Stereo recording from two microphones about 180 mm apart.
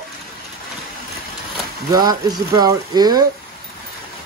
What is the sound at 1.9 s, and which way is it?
Speech, 20° right (ahead or behind).